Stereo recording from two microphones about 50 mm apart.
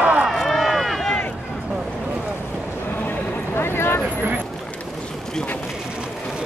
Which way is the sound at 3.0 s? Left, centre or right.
Left.